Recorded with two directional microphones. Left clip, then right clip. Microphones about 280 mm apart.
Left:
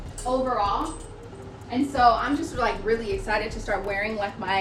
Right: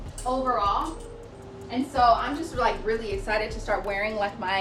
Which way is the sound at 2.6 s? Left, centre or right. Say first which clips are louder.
Right 1 dB; centre.